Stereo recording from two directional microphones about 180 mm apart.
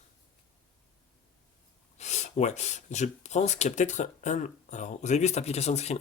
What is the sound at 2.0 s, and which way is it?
Speech, 40° left (ahead or behind).